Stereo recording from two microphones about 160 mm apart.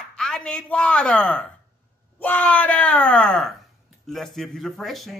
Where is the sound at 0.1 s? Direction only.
5° left (ahead or behind).